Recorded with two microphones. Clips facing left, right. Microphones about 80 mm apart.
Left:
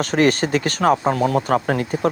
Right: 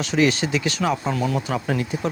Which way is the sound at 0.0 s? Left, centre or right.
Left.